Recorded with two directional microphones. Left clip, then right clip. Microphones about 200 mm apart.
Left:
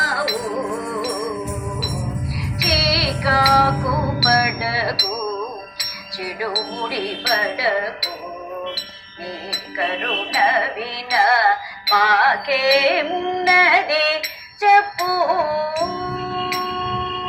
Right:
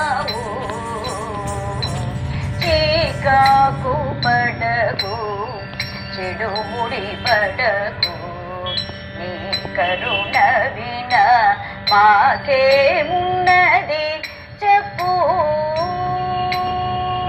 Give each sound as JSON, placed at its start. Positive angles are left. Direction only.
{"t": 2.6, "sound": "female singing", "side_deg": -30}
{"t": 4.2, "sound": "a sound", "side_deg": -30}
{"t": 6.4, "sound": "speech", "side_deg": -30}
{"t": 9.5, "sound": "music", "side_deg": -20}